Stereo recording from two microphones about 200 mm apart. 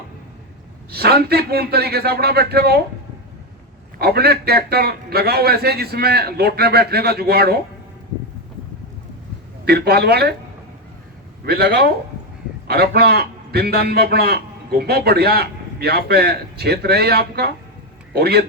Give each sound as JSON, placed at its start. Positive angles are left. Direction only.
{"t": 0.9, "sound": "a man's voice", "side_deg": -50}
{"t": 3.9, "sound": "a man's voice", "side_deg": -50}
{"t": 9.6, "sound": "a man's voice", "side_deg": -50}
{"t": 11.4, "sound": "a man's voice", "side_deg": -55}